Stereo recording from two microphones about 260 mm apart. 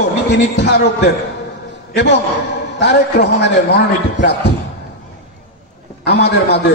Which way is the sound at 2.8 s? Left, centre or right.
Left.